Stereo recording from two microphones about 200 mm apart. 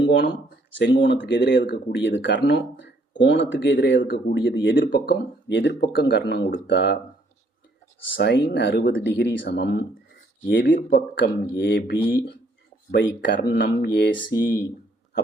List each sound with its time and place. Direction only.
0.0 s a sound: 60° left (ahead or behind)
0.8 s speech: 60° left (ahead or behind)
8.0 s speech: 65° left (ahead or behind)